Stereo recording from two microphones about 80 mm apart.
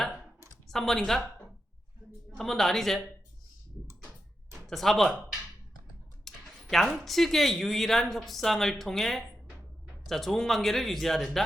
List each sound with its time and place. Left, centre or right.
0.7 s speech: centre
2.4 s speech: centre
3.8 s a sound: centre
4.5 s speech: centre
6.2 s speech: centre